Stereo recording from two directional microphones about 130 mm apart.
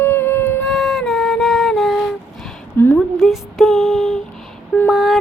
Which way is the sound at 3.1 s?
Centre (ahead or behind).